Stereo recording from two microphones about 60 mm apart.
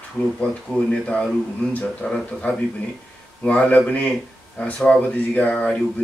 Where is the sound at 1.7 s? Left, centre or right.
Left.